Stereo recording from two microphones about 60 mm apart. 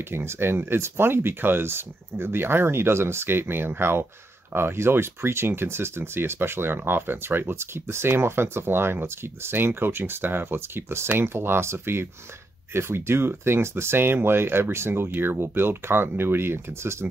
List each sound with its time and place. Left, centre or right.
0.1 s speech: right